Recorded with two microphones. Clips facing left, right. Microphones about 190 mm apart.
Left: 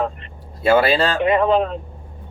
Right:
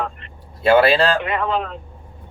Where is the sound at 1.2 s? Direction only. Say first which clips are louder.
Left 6 dB; 20° left (ahead or behind).